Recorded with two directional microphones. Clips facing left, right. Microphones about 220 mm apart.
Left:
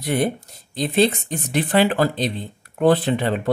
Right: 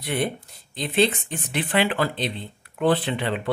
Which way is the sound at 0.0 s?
40° left (ahead or behind).